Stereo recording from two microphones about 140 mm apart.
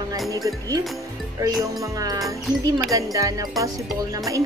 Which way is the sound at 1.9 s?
25° right (ahead or behind).